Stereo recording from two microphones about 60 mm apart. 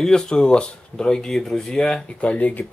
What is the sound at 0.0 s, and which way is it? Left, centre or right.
Speech, centre.